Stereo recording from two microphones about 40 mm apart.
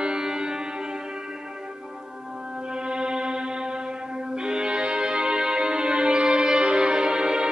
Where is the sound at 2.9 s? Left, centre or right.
Right.